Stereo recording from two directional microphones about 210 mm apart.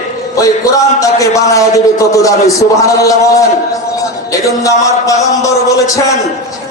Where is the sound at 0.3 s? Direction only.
15° left (ahead or behind).